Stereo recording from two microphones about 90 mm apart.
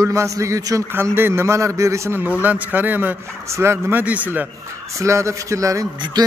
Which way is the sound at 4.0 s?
15° right (ahead or behind).